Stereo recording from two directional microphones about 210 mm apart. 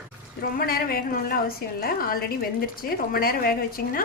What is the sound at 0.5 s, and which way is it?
A woman's voice, 45° left (ahead or behind).